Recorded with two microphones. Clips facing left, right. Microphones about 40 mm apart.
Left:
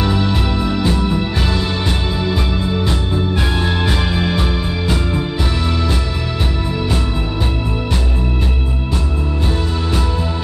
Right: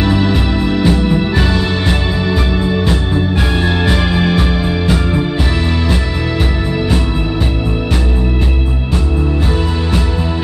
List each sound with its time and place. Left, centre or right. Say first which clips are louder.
0.0 s music: right 4 dB; right
3.6 s music: right 4 dB; centre